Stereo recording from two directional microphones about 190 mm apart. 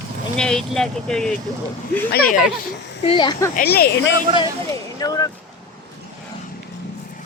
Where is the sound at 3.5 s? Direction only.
55° left (ahead or behind).